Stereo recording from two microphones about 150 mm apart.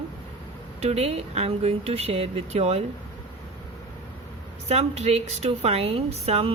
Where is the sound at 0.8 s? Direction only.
45° right (ahead or behind).